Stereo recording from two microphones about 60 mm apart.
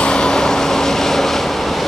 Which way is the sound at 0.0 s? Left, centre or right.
Centre.